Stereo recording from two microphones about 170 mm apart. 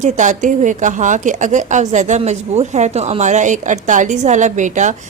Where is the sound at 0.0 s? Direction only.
45° right (ahead or behind).